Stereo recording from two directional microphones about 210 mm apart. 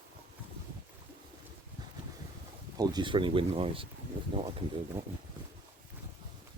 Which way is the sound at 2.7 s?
20° right (ahead or behind).